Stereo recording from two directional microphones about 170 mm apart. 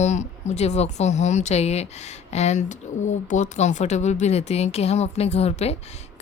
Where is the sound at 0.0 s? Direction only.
40° left (ahead or behind).